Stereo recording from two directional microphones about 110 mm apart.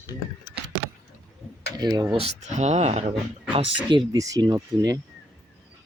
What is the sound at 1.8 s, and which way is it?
Speech, 35° right (ahead or behind).